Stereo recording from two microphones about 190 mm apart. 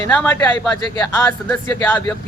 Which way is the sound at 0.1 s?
10° left (ahead or behind).